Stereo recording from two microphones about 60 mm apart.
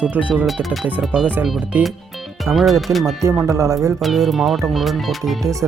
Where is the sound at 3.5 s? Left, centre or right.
Right.